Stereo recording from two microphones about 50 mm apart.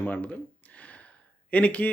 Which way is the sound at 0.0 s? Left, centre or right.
Left.